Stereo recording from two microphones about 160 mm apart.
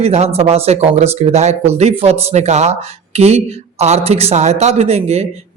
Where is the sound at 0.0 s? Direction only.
45° right (ahead or behind).